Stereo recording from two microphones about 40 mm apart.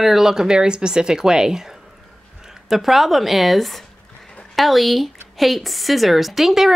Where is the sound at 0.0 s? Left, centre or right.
Centre.